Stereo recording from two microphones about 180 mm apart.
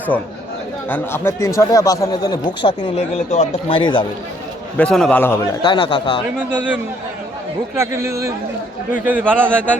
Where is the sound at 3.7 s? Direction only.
25° left (ahead or behind).